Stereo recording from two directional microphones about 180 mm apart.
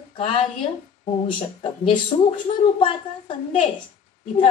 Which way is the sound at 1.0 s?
30° left (ahead or behind).